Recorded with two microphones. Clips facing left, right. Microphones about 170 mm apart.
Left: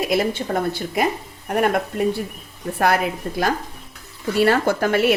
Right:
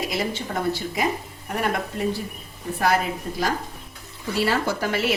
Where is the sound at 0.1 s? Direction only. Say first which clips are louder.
Left 6 dB; 55° left (ahead or behind).